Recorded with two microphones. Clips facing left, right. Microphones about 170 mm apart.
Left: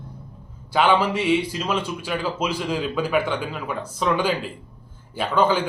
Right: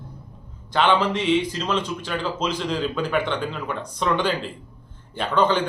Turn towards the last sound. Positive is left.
turn(degrees=10)  # may be behind; listen again after turning